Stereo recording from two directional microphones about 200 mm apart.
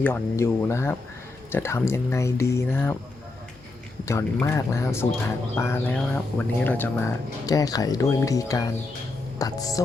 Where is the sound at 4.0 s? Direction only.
15° left (ahead or behind).